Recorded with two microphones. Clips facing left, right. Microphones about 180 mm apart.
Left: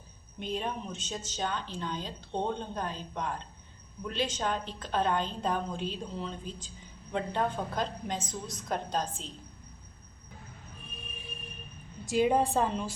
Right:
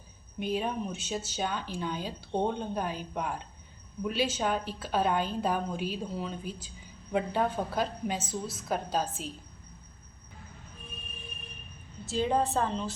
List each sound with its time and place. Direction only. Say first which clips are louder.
0.3 s a woman's voice: right 3 dB; 5° right (ahead or behind)
12.0 s a woman's voice: left 2 dB; 15° left (ahead or behind)